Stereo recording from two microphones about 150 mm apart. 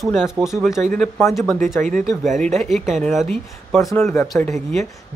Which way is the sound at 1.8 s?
55° right (ahead or behind).